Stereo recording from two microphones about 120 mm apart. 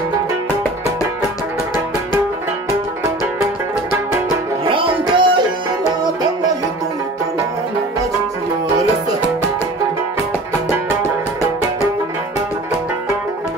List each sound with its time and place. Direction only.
4.6 s music: 45° right (ahead or behind)